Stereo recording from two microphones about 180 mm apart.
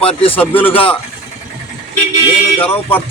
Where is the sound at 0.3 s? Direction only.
10° left (ahead or behind).